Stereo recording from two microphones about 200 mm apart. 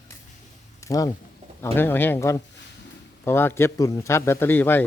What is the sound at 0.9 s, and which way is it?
A man's voice, 20° left (ahead or behind).